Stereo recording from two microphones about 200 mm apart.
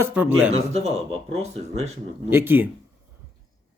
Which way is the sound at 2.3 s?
10° right (ahead or behind).